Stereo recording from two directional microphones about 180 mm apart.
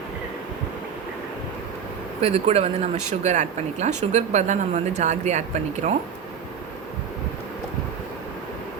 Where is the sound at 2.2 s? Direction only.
35° right (ahead or behind).